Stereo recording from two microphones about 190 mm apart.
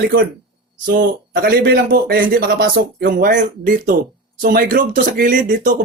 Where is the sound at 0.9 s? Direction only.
50° right (ahead or behind).